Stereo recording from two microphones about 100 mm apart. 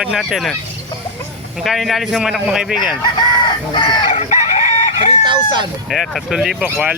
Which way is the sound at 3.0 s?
50° left (ahead or behind).